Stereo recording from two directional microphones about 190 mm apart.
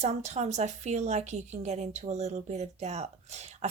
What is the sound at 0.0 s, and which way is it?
Speech, 35° right (ahead or behind).